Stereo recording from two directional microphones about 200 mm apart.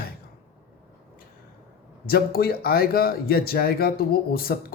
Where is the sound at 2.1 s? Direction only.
50° left (ahead or behind).